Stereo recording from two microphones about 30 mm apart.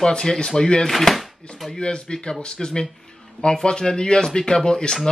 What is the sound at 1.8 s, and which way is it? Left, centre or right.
Speech, left.